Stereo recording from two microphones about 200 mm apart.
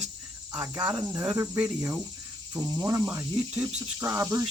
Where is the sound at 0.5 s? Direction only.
5° right (ahead or behind).